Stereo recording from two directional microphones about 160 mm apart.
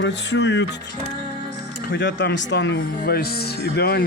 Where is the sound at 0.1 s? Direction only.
90° left.